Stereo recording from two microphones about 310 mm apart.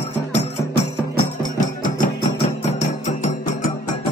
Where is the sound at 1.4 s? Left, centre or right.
Left.